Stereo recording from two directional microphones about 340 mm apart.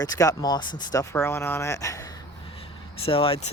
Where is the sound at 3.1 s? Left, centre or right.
Centre.